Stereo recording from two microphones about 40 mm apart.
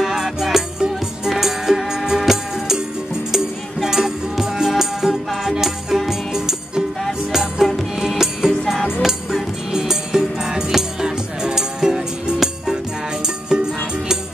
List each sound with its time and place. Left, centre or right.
0.0 s music: centre